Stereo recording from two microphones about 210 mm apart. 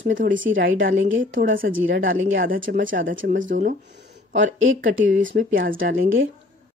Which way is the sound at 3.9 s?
55° right (ahead or behind).